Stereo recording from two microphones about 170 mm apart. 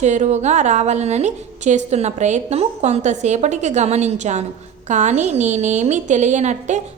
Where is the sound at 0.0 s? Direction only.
45° right (ahead or behind).